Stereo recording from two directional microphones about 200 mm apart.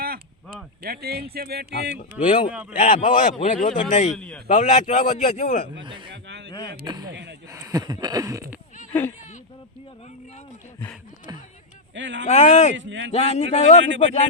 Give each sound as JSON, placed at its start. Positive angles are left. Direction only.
{"t": 0.8, "sound": "speech", "side_deg": -50}
{"t": 2.7, "sound": "a man's voice", "side_deg": 40}
{"t": 4.1, "sound": "a man's voice", "side_deg": 5}
{"t": 4.4, "sound": "a man's voice", "side_deg": 35}
{"t": 6.2, "sound": "a sound", "side_deg": -60}
{"t": 6.8, "sound": "speech", "side_deg": -20}
{"t": 7.1, "sound": "a man's voice", "side_deg": -60}
{"t": 7.5, "sound": "a sound", "side_deg": -15}
{"t": 8.9, "sound": "speech", "side_deg": 10}
{"t": 11.9, "sound": "a man's voice", "side_deg": -65}
{"t": 12.2, "sound": "a man's voice", "side_deg": 35}
{"t": 12.7, "sound": "a man's voice", "side_deg": -65}
{"t": 13.1, "sound": "a man's voice", "side_deg": 30}